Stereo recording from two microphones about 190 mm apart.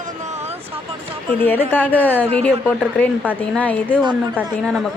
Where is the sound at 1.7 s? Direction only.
10° left (ahead or behind).